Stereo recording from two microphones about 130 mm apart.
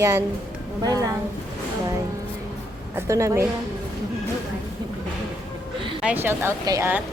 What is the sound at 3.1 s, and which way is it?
Speech, 25° right (ahead or behind).